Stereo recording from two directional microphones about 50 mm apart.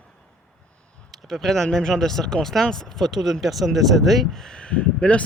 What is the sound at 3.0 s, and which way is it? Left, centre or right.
Speech, centre.